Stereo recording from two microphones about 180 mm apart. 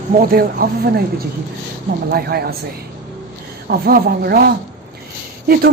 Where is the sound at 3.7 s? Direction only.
60° right (ahead or behind).